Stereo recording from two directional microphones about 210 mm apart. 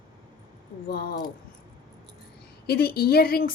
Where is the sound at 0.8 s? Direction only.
50° left (ahead or behind).